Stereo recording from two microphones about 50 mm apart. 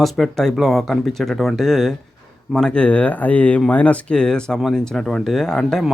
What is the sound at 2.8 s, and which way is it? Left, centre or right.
Speech, left.